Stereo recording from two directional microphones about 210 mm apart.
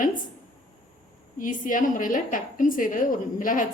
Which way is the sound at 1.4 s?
40° left (ahead or behind).